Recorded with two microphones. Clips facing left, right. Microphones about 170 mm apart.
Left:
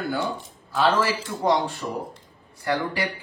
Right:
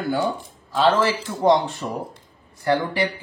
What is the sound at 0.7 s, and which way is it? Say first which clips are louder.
Speech: right 3 dB; 20° right (ahead or behind).